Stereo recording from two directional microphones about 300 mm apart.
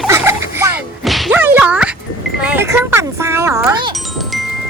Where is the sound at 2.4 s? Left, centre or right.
Centre.